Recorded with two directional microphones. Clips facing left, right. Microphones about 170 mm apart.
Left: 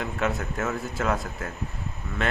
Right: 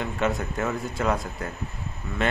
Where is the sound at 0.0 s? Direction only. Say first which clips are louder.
Right 2 dB; centre (ahead or behind).